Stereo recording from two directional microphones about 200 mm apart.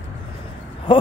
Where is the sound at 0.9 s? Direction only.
25° left (ahead or behind).